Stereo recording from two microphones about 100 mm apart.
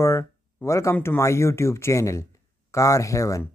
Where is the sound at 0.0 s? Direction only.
25° left (ahead or behind).